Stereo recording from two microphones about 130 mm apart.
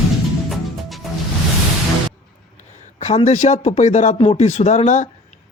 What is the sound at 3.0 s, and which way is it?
Speech, 55° left (ahead or behind).